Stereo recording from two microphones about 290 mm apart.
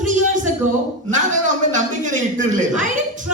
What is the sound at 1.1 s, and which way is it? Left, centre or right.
A man's voice, right.